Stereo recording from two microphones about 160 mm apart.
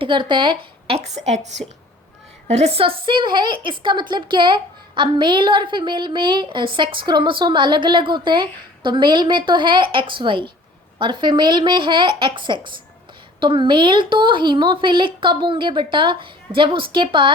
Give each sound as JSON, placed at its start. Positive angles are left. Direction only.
{"t": 0.0, "sound": "a woman's voice", "side_deg": -30}
{"t": 2.5, "sound": "a woman's voice", "side_deg": -40}